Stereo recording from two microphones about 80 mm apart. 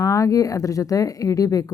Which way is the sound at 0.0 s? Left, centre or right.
Left.